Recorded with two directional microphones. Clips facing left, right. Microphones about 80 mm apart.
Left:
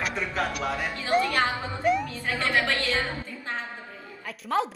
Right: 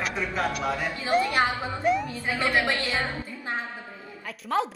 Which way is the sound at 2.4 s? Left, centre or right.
Centre.